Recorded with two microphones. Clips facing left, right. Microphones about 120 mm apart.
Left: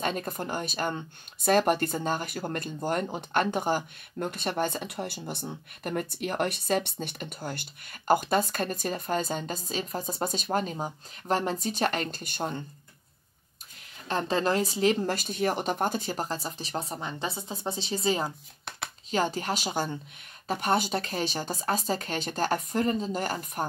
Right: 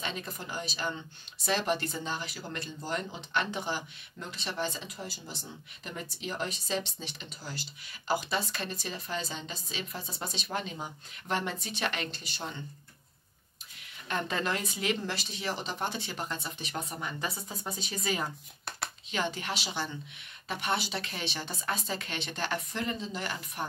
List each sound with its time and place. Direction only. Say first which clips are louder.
0.0 s speech: left 7 dB; 50° left (ahead or behind)
14.0 s a woman's voice: left 6 dB; 35° left (ahead or behind)